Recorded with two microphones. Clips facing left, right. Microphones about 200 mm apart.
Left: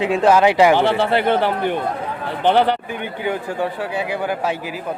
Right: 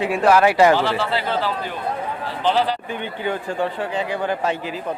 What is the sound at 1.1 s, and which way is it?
A man's voice, 60° left (ahead or behind).